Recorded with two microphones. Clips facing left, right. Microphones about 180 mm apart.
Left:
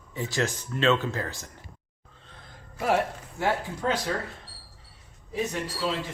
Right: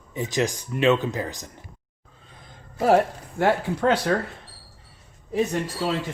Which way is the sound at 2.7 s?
35° right (ahead or behind).